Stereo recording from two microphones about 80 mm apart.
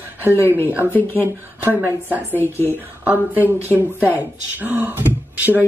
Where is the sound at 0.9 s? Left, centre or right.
Left.